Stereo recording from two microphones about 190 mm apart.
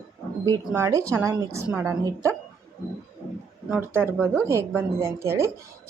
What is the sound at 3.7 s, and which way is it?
A woman's voice, 10° right (ahead or behind).